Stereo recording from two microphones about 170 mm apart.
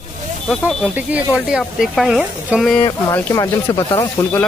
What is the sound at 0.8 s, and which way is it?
Speech, 10° right (ahead or behind).